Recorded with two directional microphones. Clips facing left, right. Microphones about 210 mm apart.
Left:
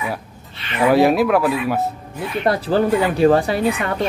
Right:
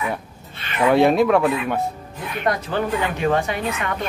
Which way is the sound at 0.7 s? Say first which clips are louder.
Left 1 dB; 5° left (ahead or behind).